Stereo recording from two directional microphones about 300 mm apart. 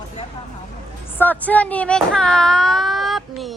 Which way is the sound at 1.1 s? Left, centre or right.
Centre.